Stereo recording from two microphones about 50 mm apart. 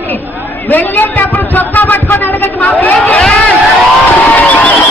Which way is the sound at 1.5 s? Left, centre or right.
Left.